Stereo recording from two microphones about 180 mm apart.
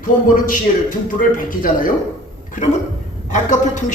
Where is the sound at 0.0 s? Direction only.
50° left (ahead or behind).